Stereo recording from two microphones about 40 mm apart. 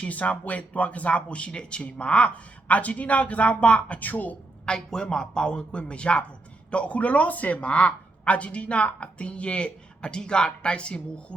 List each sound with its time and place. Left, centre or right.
0.0 s speech: left
4.6 s a man's voice: centre